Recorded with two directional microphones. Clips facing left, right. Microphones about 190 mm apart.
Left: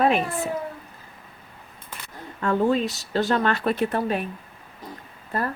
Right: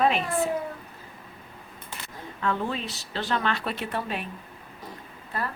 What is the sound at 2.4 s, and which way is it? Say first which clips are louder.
Speech: left 8 dB; 45° left (ahead or behind).